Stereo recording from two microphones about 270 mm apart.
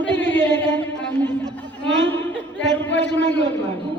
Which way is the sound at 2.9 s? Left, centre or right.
Left.